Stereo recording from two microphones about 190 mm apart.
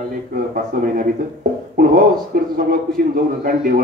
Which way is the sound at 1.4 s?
50° right (ahead or behind).